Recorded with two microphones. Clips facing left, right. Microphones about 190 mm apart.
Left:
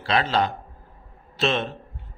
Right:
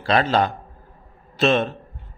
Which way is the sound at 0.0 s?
50° right (ahead or behind).